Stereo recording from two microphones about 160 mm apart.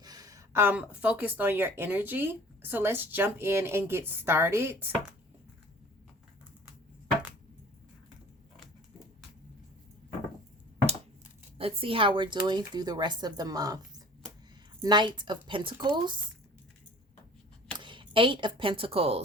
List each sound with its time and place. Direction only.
0.0 s speech: 25° right (ahead or behind)
11.5 s speech: 35° right (ahead or behind)
17.7 s speech: 30° right (ahead or behind)